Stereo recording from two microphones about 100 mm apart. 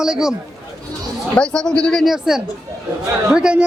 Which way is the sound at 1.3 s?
10° left (ahead or behind).